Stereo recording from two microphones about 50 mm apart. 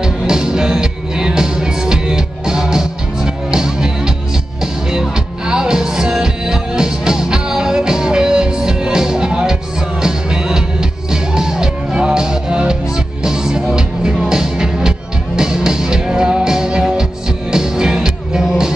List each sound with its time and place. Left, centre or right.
0.0 s music: centre
5.1 s music: centre